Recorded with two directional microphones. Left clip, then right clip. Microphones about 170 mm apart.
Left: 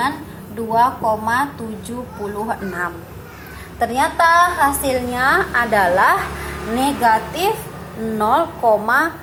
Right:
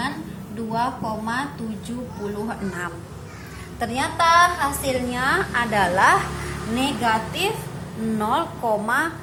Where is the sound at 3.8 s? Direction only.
15° right (ahead or behind).